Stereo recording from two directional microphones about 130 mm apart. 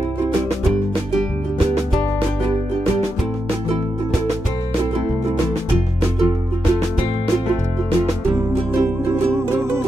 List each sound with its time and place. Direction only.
8.4 s music: 20° right (ahead or behind)